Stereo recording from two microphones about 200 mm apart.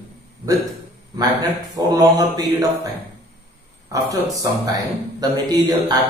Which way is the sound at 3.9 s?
15° right (ahead or behind).